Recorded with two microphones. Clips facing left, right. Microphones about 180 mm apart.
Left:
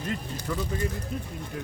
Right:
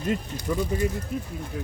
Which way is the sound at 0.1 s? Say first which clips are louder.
Right 6 dB; 15° right (ahead or behind).